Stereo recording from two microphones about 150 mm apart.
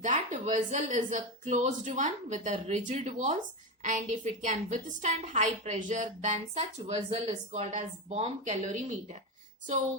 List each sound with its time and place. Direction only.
0.0 s a woman's voice: 55° right (ahead or behind)